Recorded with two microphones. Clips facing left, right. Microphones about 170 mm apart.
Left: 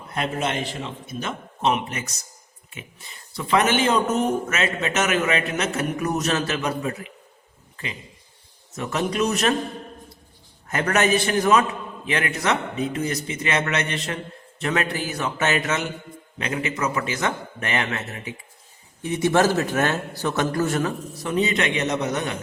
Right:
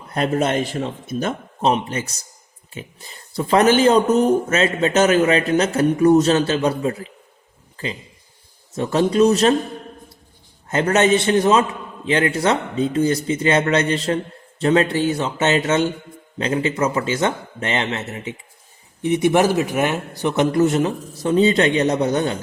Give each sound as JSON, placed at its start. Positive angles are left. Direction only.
{"t": 0.1, "sound": "speech", "side_deg": -40}
{"t": 8.7, "sound": "a man's voice", "side_deg": -30}
{"t": 10.7, "sound": "a man's voice", "side_deg": -25}